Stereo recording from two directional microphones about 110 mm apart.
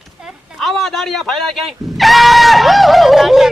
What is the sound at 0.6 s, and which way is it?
Speech, centre (ahead or behind).